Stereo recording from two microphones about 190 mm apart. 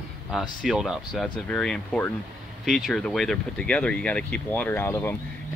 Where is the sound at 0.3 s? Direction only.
Centre (ahead or behind).